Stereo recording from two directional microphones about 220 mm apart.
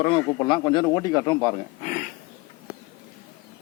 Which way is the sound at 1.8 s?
35° left (ahead or behind).